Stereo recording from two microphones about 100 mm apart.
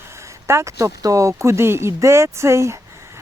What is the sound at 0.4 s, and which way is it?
Speech, 30° right (ahead or behind).